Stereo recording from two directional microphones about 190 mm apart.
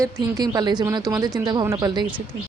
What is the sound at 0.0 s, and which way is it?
Speech, 20° right (ahead or behind).